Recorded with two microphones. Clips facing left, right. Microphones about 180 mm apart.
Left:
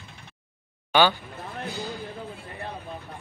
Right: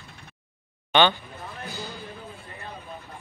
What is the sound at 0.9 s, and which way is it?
Speech, 5° left (ahead or behind).